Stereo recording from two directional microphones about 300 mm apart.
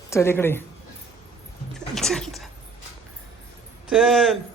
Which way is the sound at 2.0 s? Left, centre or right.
Centre.